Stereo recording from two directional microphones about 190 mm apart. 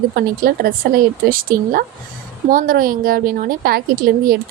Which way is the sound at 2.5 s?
50° right (ahead or behind).